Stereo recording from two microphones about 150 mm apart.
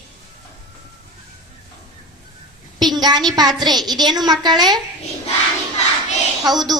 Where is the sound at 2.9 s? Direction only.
30° right (ahead or behind).